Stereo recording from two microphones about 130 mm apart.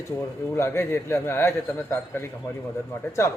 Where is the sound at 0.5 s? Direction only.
20° left (ahead or behind).